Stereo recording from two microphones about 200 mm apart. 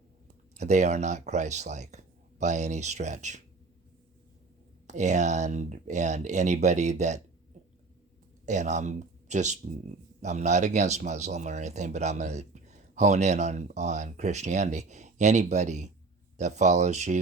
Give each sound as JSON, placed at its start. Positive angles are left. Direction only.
{"t": 0.5, "sound": "speech", "side_deg": -35}
{"t": 4.9, "sound": "speech", "side_deg": -35}
{"t": 8.4, "sound": "speech", "side_deg": -35}